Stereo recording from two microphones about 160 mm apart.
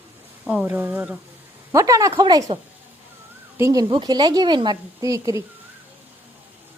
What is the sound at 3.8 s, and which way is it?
Speech, 30° right (ahead or behind).